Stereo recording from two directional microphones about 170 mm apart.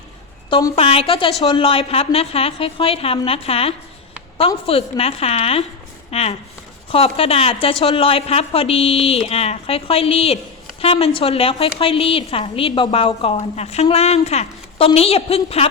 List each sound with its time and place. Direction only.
0.5 s a woman's voice: 30° left (ahead or behind)